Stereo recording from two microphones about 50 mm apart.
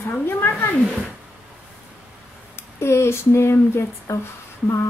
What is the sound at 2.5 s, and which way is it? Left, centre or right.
Speech, left.